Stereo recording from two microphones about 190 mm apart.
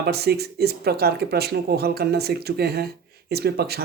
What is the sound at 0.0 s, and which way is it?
Speech, 55° right (ahead or behind).